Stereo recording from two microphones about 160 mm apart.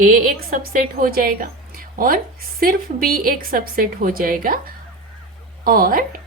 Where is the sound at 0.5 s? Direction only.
65° right (ahead or behind).